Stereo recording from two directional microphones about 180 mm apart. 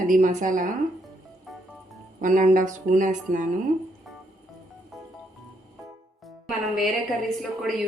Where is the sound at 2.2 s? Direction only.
45° right (ahead or behind).